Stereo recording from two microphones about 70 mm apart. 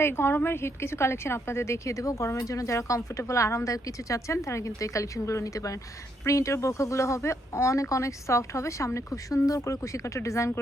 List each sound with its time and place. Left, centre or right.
0.0 s a woman's voice: left